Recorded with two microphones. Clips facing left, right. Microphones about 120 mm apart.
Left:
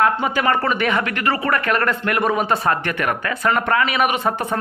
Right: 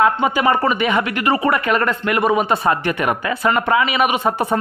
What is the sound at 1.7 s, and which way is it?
Speech, 5° right (ahead or behind).